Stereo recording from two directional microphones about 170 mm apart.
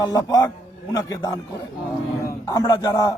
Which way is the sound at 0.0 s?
20° left (ahead or behind).